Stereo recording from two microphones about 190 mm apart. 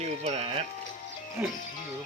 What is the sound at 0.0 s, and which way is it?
Music, 35° right (ahead or behind).